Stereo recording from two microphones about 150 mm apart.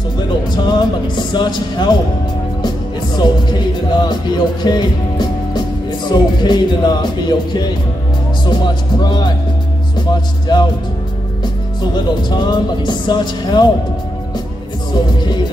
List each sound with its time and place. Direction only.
0.7 s speech: 30° left (ahead or behind)
3.2 s speech: 30° left (ahead or behind)
10.5 s speech: 30° left (ahead or behind)
15.1 s speech: 30° left (ahead or behind)